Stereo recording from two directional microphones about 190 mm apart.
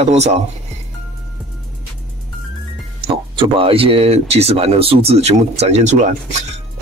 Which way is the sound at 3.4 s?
30° right (ahead or behind).